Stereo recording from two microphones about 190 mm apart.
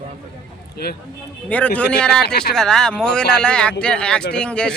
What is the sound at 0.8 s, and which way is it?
Speech, 55° left (ahead or behind).